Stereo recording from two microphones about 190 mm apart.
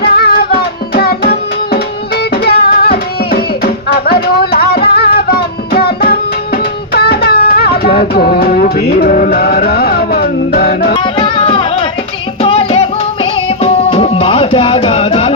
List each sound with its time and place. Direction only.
0.2 s music: 55° left (ahead or behind)
10.9 s music: 25° left (ahead or behind)